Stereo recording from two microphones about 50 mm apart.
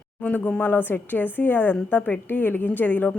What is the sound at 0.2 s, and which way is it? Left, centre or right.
A woman's voice, left.